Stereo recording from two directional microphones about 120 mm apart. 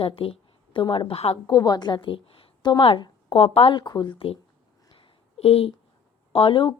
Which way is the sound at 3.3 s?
55° left (ahead or behind).